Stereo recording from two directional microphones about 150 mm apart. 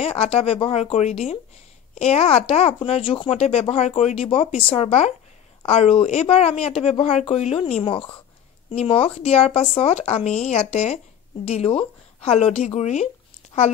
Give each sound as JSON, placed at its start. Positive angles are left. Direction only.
{"t": 0.0, "sound": "speech", "side_deg": 40}